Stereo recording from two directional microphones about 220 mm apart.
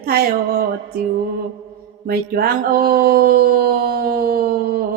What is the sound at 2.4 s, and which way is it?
Speech, 40° right (ahead or behind).